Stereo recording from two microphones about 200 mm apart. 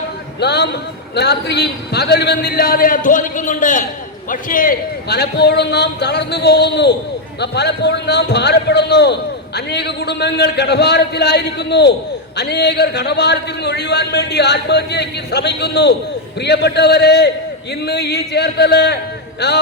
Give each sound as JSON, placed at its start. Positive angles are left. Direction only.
{"t": 0.3, "sound": "a man's voice", "side_deg": 55}